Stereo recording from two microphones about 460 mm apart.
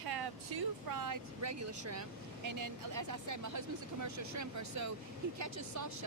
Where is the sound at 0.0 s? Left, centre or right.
Right.